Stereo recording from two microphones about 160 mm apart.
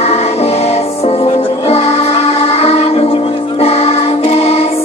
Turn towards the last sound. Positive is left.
turn(degrees=40)  # may be behind; listen again after turning